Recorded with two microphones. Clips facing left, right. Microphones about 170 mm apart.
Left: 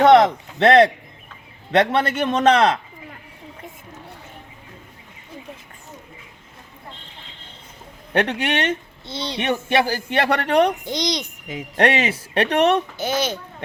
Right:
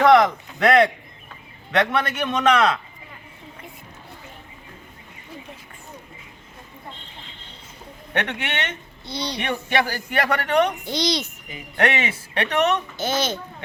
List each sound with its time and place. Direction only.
0.0 s a man's voice: 25° left (ahead or behind)
8.1 s speech: 30° left (ahead or behind)
10.8 s a child's voice: 20° left (ahead or behind)
11.8 s a man's voice: 35° left (ahead or behind)
13.0 s a child's voice: 10° left (ahead or behind)